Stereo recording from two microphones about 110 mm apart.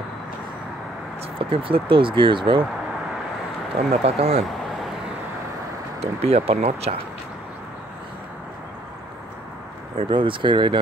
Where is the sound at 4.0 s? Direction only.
70° right (ahead or behind).